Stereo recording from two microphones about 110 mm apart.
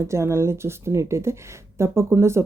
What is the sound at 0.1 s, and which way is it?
Speech, 25° right (ahead or behind).